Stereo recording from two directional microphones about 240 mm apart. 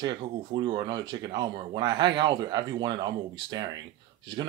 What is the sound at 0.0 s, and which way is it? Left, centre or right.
Speech, centre.